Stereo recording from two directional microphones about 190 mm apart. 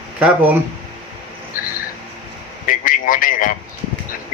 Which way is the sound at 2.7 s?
45° left (ahead or behind).